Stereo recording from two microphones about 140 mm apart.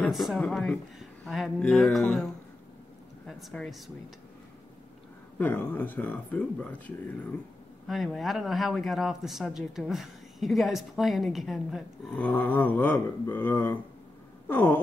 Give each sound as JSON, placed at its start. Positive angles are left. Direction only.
{"t": 0.1, "sound": "speech", "side_deg": 0}
{"t": 5.4, "sound": "speech", "side_deg": 10}
{"t": 7.8, "sound": "speech", "side_deg": 0}